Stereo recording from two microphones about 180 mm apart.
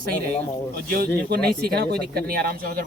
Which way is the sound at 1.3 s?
60° right (ahead or behind).